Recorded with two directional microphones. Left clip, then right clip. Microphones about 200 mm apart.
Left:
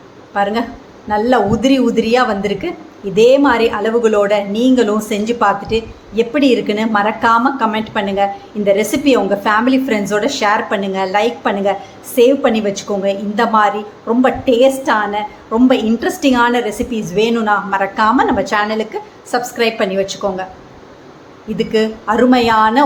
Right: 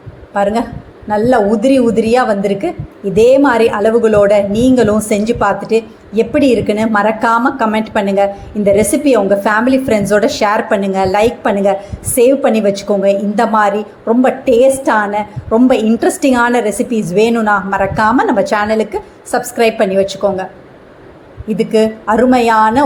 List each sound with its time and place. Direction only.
0.3 s a woman's voice: 15° right (ahead or behind)
21.6 s a woman's voice: 15° right (ahead or behind)